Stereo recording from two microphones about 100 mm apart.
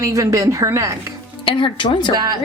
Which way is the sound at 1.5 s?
60° left (ahead or behind).